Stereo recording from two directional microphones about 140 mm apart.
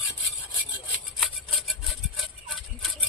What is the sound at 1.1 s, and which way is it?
Rub, centre (ahead or behind).